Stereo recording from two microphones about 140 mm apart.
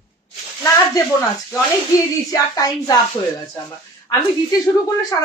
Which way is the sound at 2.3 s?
25° left (ahead or behind).